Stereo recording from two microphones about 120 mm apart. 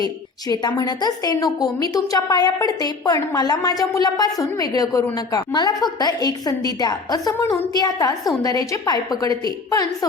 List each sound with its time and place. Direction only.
0.4 s a woman's voice: 30° left (ahead or behind)